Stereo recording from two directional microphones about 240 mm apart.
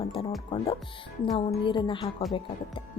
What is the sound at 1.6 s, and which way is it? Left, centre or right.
Speech, centre.